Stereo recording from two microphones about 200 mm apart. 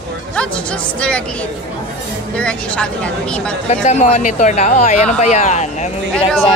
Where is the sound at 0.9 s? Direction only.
5° left (ahead or behind).